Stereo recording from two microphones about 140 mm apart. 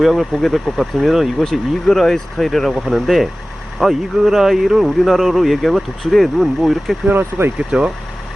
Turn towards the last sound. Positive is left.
turn(degrees=-5)  # may be behind; listen again after turning